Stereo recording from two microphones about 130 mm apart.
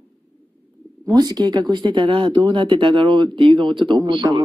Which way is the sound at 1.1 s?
30° right (ahead or behind).